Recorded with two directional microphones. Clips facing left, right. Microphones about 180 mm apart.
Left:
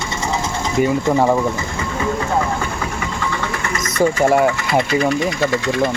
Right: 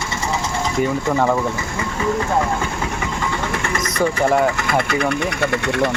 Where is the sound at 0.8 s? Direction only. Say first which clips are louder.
Left 4 dB; 5° left (ahead or behind).